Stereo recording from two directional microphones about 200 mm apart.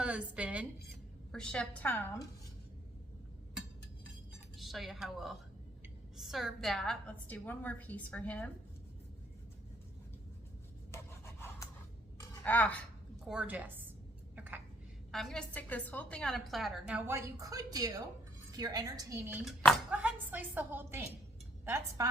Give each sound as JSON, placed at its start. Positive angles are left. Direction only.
{"t": 0.0, "sound": "a sound", "side_deg": -5}
{"t": 1.3, "sound": "a woman's voice", "side_deg": 5}
{"t": 4.5, "sound": "a woman's voice", "side_deg": 0}
{"t": 10.9, "sound": "rub", "side_deg": 15}
{"t": 12.4, "sound": "speech", "side_deg": 10}
{"t": 13.2, "sound": "a woman's voice", "side_deg": -5}
{"t": 14.3, "sound": "dishes", "side_deg": -10}
{"t": 15.1, "sound": "a woman's voice", "side_deg": 0}
{"t": 19.5, "sound": "a woman's voice", "side_deg": -5}